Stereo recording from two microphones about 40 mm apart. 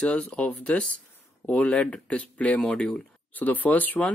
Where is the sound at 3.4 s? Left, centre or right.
Left.